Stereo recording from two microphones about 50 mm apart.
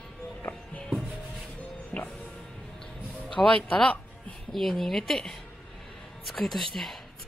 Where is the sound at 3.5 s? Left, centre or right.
Left.